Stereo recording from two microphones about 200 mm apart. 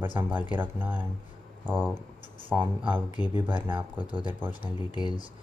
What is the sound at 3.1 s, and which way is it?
Speech, 20° left (ahead or behind).